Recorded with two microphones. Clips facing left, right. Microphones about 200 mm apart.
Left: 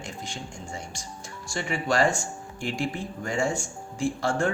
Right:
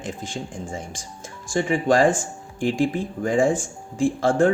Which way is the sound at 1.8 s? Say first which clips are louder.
Right 5 dB; 50° right (ahead or behind).